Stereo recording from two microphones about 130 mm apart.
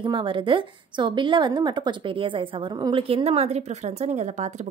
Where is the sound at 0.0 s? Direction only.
40° right (ahead or behind).